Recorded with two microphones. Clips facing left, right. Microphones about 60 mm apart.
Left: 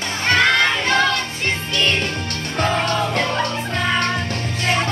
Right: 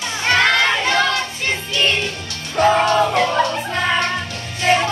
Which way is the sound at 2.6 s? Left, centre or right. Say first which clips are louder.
Right 6 dB; centre.